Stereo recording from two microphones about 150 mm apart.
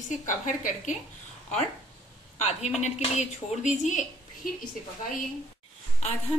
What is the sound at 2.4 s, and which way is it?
A woman's voice, 50° left (ahead or behind).